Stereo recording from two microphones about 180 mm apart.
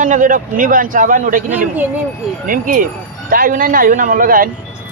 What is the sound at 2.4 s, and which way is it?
Speech, 50° right (ahead or behind).